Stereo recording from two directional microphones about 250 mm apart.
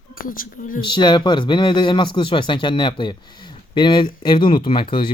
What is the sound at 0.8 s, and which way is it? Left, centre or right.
Speech, centre.